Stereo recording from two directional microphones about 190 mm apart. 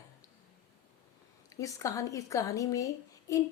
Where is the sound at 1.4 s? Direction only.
15° left (ahead or behind).